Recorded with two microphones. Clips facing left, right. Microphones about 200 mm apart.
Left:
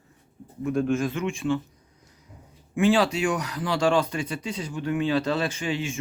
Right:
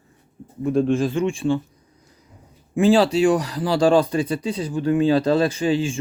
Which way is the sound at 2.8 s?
35° right (ahead or behind).